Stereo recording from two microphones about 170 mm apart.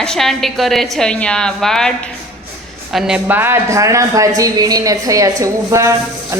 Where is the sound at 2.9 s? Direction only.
5° right (ahead or behind).